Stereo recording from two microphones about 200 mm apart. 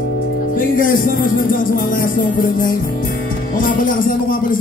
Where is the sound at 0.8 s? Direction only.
45° left (ahead or behind).